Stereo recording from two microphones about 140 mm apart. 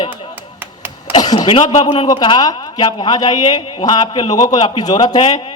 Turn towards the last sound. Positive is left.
turn(degrees=35)  # may be behind; listen again after turning